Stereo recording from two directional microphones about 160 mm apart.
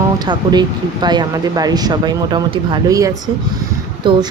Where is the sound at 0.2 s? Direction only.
25° right (ahead or behind).